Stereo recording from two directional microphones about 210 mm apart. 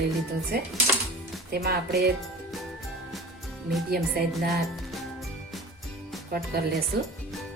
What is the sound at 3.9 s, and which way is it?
Speech, 45° right (ahead or behind).